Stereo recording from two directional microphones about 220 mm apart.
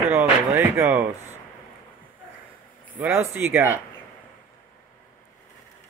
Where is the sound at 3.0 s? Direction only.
10° right (ahead or behind).